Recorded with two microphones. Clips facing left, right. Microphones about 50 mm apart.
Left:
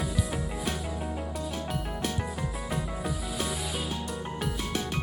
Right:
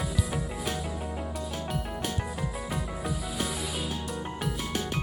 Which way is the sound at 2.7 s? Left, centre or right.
Centre.